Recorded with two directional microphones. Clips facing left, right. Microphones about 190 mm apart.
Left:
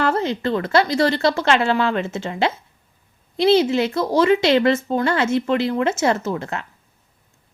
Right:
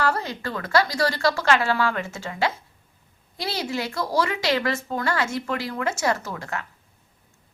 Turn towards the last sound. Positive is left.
turn(degrees=25)  # may be behind; listen again after turning